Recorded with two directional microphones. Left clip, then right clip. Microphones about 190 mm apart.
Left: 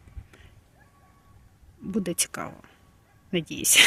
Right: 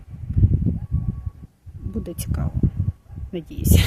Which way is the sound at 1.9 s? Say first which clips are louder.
Left 4 dB; 10° left (ahead or behind).